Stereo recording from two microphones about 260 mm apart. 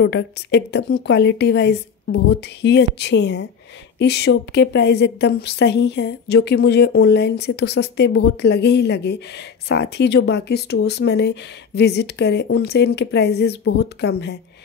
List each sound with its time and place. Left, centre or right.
0.0 s a woman's voice: left